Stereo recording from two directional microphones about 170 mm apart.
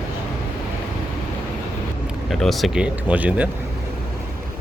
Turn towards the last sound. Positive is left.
turn(degrees=-10)  # may be behind; listen again after turning